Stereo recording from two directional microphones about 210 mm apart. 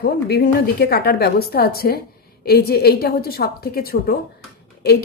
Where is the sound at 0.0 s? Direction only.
50° left (ahead or behind).